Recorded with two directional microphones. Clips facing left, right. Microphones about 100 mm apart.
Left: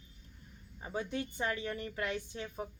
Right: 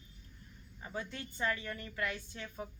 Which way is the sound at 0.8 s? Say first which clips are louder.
Left 5 dB; 20° left (ahead or behind).